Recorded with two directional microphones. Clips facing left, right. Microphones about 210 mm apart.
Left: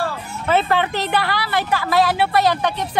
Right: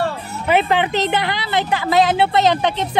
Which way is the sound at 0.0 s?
15° right (ahead or behind).